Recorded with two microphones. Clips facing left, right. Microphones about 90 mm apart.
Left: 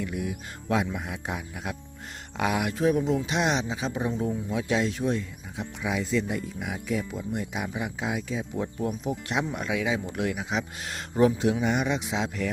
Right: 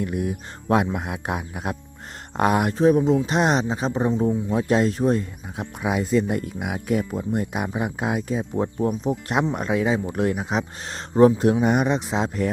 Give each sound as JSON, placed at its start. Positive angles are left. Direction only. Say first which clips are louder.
{"t": 0.0, "sound": "speech", "louder": "right 6 dB", "side_deg": -50}
{"t": 2.7, "sound": "speech", "louder": "right 6 dB", "side_deg": -35}
{"t": 9.3, "sound": "speech", "louder": "right 6 dB", "side_deg": -50}
{"t": 11.6, "sound": "speech", "louder": "right 6 dB", "side_deg": -50}